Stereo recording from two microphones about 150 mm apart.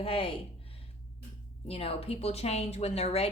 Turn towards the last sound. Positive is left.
turn(degrees=45)  # may be behind; listen again after turning